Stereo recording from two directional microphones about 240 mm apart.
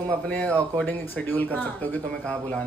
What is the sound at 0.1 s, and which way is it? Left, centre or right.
A man's voice, centre.